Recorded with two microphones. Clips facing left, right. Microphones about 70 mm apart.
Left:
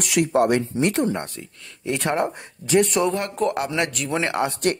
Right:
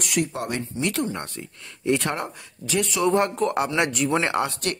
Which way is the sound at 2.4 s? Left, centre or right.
Left.